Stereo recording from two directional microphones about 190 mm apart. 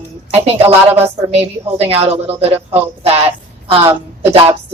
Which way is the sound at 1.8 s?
30° right (ahead or behind).